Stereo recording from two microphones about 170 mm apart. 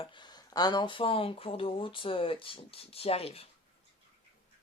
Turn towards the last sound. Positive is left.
turn(degrees=35)  # may be behind; listen again after turning